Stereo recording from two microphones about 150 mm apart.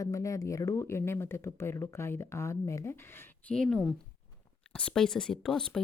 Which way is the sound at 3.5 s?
5° left (ahead or behind).